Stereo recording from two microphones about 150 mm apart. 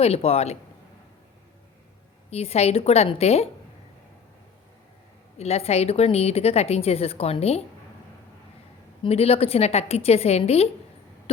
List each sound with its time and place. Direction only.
0.0 s a woman's voice: 40° left (ahead or behind)
2.3 s a woman's voice: 45° left (ahead or behind)
5.4 s a woman's voice: 45° left (ahead or behind)
9.0 s a woman's voice: 40° left (ahead or behind)